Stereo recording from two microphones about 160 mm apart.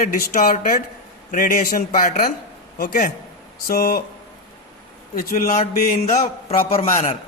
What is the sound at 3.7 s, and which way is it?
Speech, 70° left (ahead or behind).